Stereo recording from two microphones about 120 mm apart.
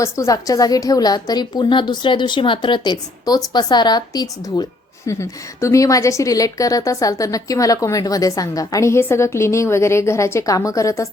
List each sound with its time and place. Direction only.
0.0 s a woman's voice: 25° left (ahead or behind)